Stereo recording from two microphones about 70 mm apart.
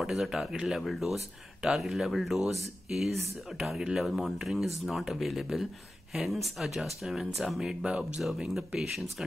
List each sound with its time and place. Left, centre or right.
0.0 s speech: centre